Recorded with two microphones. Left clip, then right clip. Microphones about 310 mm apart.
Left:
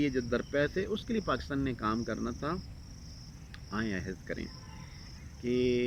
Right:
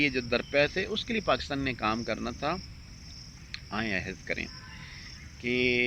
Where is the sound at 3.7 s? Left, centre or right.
Centre.